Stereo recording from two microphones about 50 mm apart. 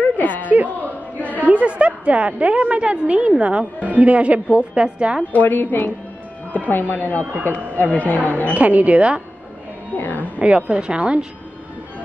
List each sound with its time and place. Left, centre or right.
0.2 s a sound: left
1.4 s a woman's voice: right
5.3 s a woman's voice: left
8.5 s a woman's voice: right
9.9 s a woman's voice: left
10.2 s a woman's voice: right